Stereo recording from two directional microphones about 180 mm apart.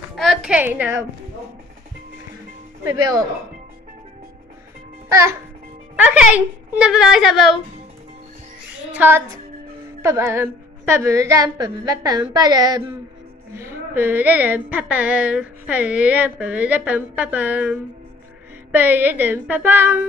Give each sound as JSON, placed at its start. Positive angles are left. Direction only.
{"t": 0.1, "sound": "a sound", "side_deg": 0}
{"t": 0.6, "sound": "a woman's voice", "side_deg": -10}
{"t": 2.8, "sound": "a woman's voice", "side_deg": -20}
{"t": 5.1, "sound": "a woman's voice", "side_deg": -15}
{"t": 8.9, "sound": "a woman's voice", "side_deg": -10}